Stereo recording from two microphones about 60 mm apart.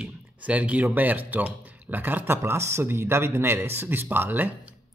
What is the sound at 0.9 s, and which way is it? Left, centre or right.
Speech, right.